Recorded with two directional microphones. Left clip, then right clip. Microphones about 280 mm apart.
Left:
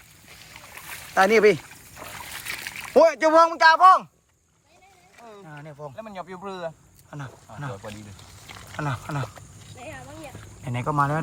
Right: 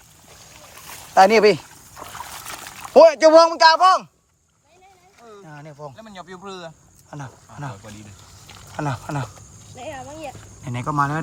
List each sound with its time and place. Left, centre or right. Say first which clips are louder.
1.1 s speech: right 4 dB; centre
5.5 s speech: right 2 dB; centre
6.0 s speech: left 2 dB; centre
7.1 s speech: right 2 dB; centre
8.7 s speech: right 4 dB; centre
9.7 s speech: right 6 dB; right
10.6 s speech: right 2 dB; centre